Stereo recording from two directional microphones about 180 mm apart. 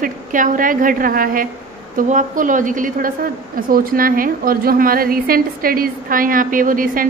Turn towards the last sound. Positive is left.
turn(degrees=-50)  # may be behind; listen again after turning